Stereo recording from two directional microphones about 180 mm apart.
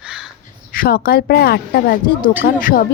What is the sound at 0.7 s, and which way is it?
Speech, 55° left (ahead or behind).